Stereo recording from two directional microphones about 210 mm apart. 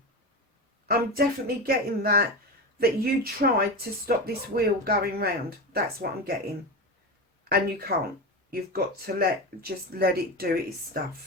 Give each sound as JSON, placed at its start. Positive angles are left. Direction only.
{"t": 0.9, "sound": "speech", "side_deg": -45}
{"t": 7.5, "sound": "speech", "side_deg": -45}